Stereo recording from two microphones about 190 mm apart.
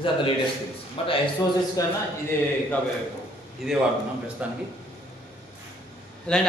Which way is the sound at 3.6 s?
Centre (ahead or behind).